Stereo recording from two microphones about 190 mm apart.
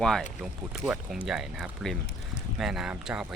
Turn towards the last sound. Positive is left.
turn(degrees=-5)  # may be behind; listen again after turning